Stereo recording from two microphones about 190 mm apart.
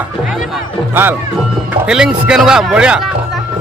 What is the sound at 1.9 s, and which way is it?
Speech, 5° right (ahead or behind).